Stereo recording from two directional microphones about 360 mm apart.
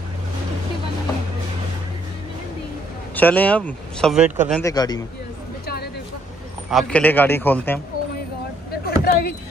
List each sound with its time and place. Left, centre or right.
3.2 s speech: centre
6.7 s speech: centre
8.8 s a sound: left